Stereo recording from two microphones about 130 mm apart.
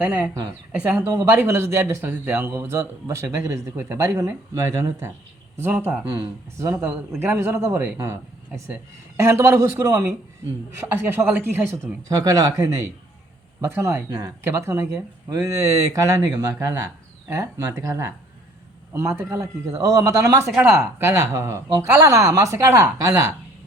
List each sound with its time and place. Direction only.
0.0 s speech: 10° right (ahead or behind)
1.0 s speech: 25° right (ahead or behind)
7.2 s speech: 20° right (ahead or behind)